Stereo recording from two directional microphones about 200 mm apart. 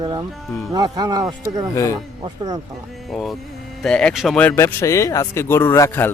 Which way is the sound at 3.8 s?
5° left (ahead or behind).